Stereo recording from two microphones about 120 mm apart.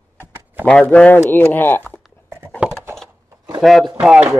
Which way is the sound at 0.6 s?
10° left (ahead or behind).